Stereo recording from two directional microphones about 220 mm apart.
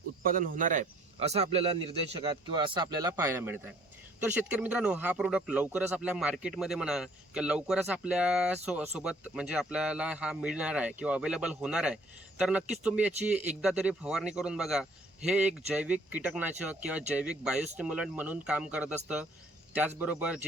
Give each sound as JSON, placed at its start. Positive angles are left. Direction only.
{"t": 0.3, "sound": "a man's voice", "side_deg": -40}